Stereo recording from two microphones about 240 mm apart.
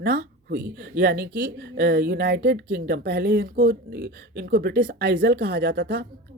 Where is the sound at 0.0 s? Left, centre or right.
Right.